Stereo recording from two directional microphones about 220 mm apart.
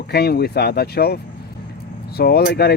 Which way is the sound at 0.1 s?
45° left (ahead or behind).